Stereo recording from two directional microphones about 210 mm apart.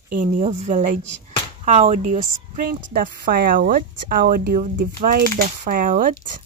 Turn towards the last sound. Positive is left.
turn(degrees=-40)  # may be behind; listen again after turning